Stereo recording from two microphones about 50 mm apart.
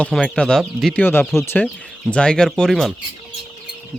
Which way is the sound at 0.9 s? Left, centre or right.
Left.